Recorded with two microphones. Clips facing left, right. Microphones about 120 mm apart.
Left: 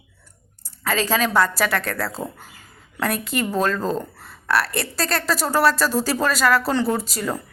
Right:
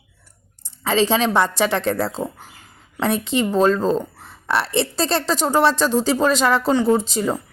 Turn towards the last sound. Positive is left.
turn(degrees=-20)  # may be behind; listen again after turning